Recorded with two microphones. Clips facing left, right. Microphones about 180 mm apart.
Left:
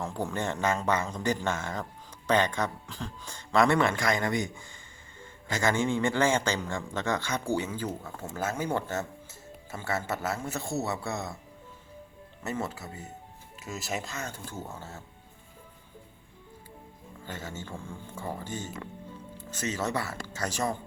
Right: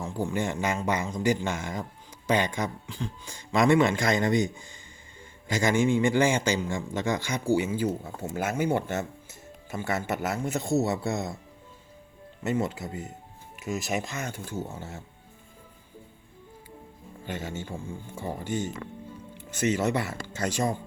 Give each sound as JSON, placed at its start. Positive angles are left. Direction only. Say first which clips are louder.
{"t": 0.3, "sound": "a man's voice", "louder": "even", "side_deg": -15}
{"t": 2.8, "sound": "speech", "louder": "right 3 dB", "side_deg": 0}
{"t": 3.3, "sound": "a man's voice", "louder": "right 2 dB", "side_deg": -15}
{"t": 8.0, "sound": "speech", "louder": "right 4 dB", "side_deg": -40}
{"t": 9.7, "sound": "a man's voice", "louder": "right 3 dB", "side_deg": -15}
{"t": 12.4, "sound": "a man's voice", "louder": "right 6 dB", "side_deg": -15}
{"t": 17.2, "sound": "a man's voice", "louder": "right 5 dB", "side_deg": -15}